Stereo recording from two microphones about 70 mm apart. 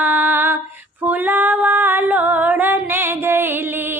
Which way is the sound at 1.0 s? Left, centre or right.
Right.